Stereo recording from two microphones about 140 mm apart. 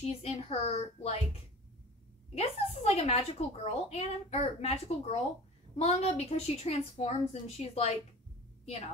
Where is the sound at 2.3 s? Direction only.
50° left (ahead or behind).